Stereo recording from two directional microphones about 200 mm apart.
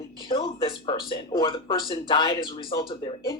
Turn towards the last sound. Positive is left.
turn(degrees=25)  # may be behind; listen again after turning